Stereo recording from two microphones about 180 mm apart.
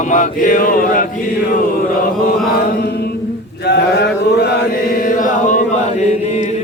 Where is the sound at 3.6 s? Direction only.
65° left (ahead or behind).